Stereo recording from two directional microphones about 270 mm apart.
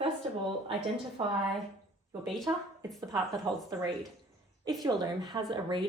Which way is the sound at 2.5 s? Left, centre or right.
Centre.